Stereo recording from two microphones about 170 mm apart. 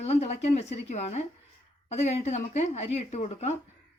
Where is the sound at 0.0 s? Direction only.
40° left (ahead or behind).